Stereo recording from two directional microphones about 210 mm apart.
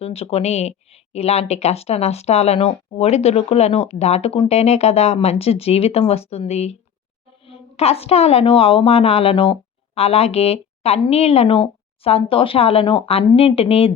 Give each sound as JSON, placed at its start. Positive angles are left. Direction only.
{"t": 0.0, "sound": "speech", "side_deg": 30}